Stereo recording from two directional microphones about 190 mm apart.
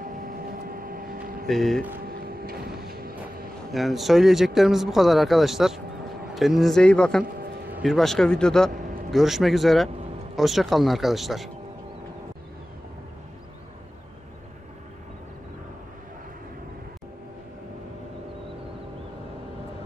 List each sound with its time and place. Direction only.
0.0 s vehicle: 45° right (ahead or behind)
1.5 s a man's voice: centre (ahead or behind)
2.0 s vehicle: 50° right (ahead or behind)
3.7 s a man's voice: centre (ahead or behind)